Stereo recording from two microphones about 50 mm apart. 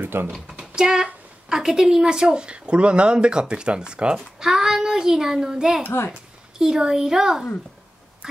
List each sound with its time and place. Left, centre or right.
0.0 s speech: right
0.3 s a child's voice: centre